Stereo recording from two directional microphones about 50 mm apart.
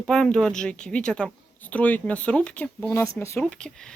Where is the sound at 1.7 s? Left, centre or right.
Left.